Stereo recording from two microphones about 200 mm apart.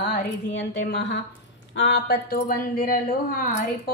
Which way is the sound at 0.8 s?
60° left (ahead or behind).